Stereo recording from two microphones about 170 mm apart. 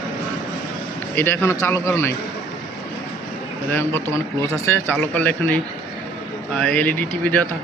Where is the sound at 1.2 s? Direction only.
15° left (ahead or behind).